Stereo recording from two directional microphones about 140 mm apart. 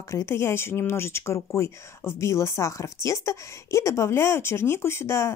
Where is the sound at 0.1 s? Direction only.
20° left (ahead or behind).